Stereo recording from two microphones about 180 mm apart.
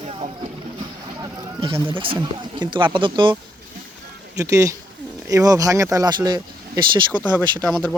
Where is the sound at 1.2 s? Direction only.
30° right (ahead or behind).